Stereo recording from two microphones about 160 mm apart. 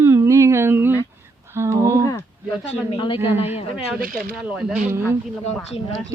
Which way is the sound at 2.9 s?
30° left (ahead or behind).